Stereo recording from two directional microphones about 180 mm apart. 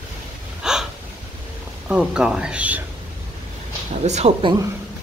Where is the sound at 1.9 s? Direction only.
5° right (ahead or behind).